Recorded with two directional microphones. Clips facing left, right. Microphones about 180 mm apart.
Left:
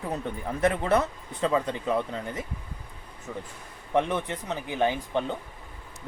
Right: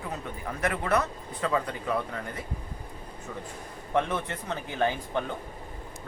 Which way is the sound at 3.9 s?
15° left (ahead or behind).